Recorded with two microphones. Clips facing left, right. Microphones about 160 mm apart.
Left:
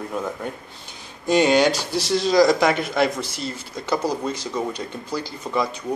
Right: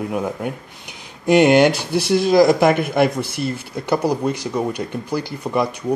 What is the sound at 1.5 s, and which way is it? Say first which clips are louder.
Speech: right 4 dB; 55° right (ahead or behind).